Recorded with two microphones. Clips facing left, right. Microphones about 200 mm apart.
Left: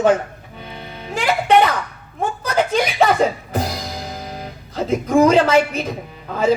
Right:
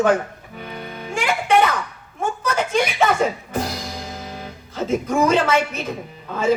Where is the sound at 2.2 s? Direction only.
35° left (ahead or behind).